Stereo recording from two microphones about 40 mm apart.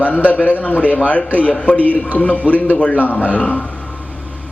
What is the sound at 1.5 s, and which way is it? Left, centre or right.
Speech, left.